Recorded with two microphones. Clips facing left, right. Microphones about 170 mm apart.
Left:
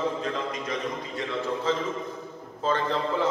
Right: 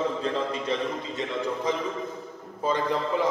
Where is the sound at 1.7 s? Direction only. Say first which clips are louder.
Left 1 dB; 15° right (ahead or behind).